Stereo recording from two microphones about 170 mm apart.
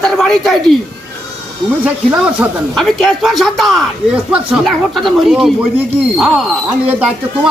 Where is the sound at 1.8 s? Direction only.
5° right (ahead or behind).